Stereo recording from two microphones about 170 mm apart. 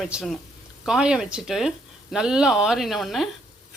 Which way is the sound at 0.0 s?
Centre (ahead or behind).